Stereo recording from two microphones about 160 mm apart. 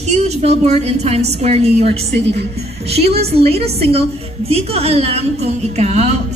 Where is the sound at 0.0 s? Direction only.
40° right (ahead or behind).